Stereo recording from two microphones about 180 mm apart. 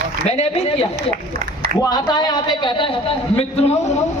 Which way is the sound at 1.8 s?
20° left (ahead or behind).